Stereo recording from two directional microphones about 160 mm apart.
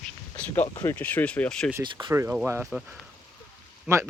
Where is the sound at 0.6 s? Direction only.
30° left (ahead or behind).